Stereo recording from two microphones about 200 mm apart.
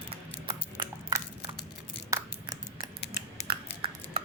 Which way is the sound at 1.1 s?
15° right (ahead or behind).